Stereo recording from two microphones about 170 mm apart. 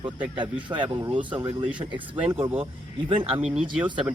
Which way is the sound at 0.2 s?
10° right (ahead or behind).